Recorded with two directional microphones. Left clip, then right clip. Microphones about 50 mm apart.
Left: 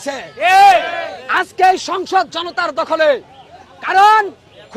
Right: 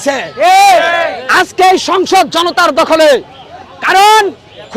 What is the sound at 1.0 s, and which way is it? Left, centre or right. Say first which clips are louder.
Speech: right 8 dB; right.